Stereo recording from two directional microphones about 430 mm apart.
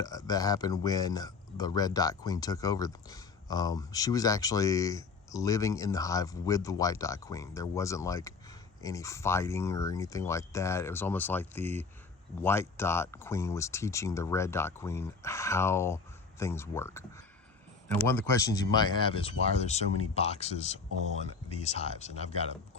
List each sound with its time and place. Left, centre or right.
0.0 s speech: centre